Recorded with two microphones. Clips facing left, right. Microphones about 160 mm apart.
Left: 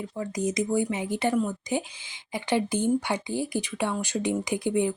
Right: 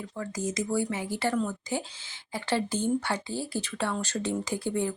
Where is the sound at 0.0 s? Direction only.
20° left (ahead or behind).